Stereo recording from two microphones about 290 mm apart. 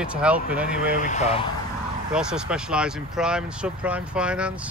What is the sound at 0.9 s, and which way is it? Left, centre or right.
Speech, left.